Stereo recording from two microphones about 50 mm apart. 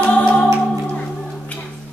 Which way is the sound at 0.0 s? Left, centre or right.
Left.